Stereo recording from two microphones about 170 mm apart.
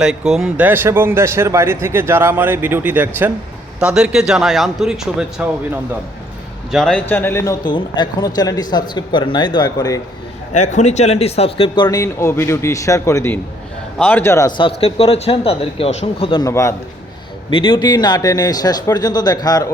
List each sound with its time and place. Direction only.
0.0 s speech: 5° right (ahead or behind)
6.7 s speech: centre (ahead or behind)
7.1 s a man's voice: 10° left (ahead or behind)
10.5 s a man's voice: 45° left (ahead or behind); by 14.7 s 25° left (ahead or behind)
14.8 s a man's voice: 35° left (ahead or behind)
16.5 s a man's voice: 15° left (ahead or behind)
17.5 s a man's voice: 30° left (ahead or behind)